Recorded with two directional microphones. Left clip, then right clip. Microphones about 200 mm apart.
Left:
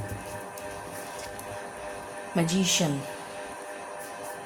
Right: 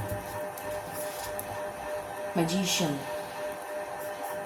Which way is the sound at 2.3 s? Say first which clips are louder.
Left 3 dB; 45° left (ahead or behind).